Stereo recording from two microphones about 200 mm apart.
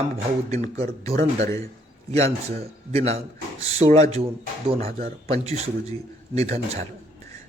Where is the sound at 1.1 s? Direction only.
50° right (ahead or behind).